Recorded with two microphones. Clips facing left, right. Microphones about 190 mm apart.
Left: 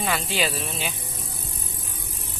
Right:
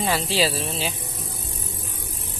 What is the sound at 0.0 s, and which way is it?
Speech, 30° right (ahead or behind).